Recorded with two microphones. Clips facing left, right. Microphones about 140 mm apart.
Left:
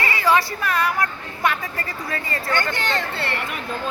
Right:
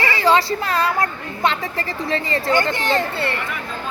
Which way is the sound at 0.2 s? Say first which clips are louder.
Right 3 dB; 25° right (ahead or behind).